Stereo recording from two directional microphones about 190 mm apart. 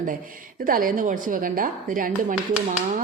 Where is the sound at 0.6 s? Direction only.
45° right (ahead or behind).